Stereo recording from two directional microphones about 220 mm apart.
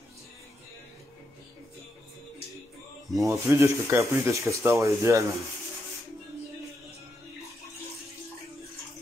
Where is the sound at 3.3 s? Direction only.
15° right (ahead or behind).